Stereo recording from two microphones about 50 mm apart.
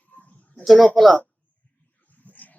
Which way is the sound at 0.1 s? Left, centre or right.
Left.